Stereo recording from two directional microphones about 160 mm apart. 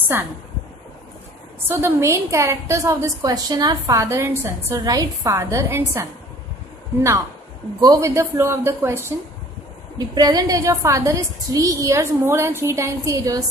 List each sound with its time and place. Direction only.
0.1 s speech: 15° right (ahead or behind)
1.7 s a woman's voice: 15° right (ahead or behind)